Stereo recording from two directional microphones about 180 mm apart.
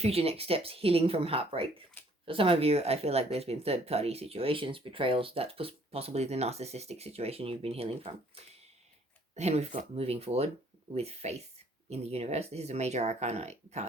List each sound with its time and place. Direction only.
0.0 s speech: 35° right (ahead or behind)